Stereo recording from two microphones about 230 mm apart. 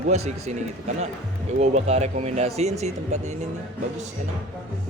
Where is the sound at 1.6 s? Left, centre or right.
Right.